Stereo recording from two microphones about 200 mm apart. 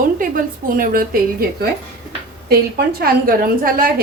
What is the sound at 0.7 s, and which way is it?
Speech, 45° right (ahead or behind).